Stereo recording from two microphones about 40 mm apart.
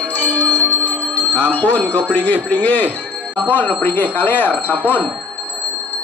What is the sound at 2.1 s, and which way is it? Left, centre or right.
Speech, left.